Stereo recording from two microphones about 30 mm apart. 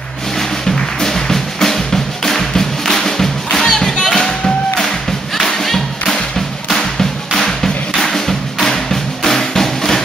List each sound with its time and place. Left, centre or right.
1.0 s music: centre
6.7 s music: centre